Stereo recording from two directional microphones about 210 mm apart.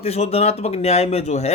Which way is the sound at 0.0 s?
30° left (ahead or behind).